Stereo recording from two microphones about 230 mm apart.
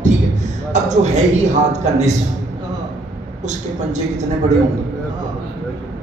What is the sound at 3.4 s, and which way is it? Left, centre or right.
A man's voice, right.